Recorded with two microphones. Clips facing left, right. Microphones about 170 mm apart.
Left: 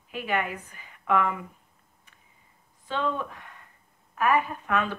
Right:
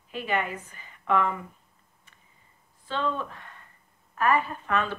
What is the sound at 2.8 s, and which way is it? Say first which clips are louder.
Speech: left 1 dB; 10° left (ahead or behind).